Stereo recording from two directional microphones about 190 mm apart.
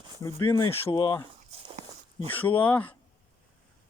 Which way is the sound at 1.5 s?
35° right (ahead or behind).